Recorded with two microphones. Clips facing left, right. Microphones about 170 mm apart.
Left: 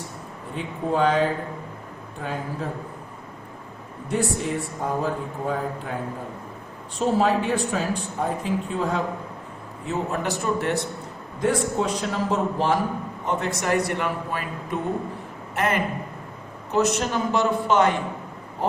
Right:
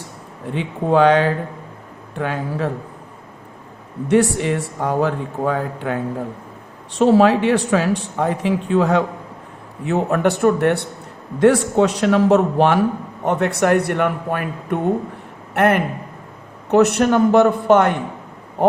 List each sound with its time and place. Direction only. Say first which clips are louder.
0.5 s speech: right 8 dB; 80° right
4.1 s speech: right 8 dB; 80° right
7.0 s speech: right 8 dB; 75° right (ahead or behind)
9.8 s a man's voice: right 9 dB; 65° right (ahead or behind)
11.3 s a man's voice: right 9 dB; 75° right (ahead or behind); by 17.9 s 55° right (ahead or behind)